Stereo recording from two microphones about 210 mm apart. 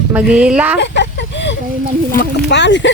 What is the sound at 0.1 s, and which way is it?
Speech, 5° right (ahead or behind).